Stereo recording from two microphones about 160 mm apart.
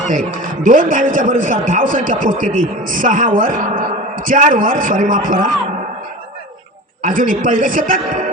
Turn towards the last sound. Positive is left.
turn(degrees=-55)  # may be behind; listen again after turning